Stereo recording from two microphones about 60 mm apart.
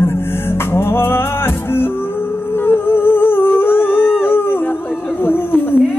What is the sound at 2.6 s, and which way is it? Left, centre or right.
Humming, left.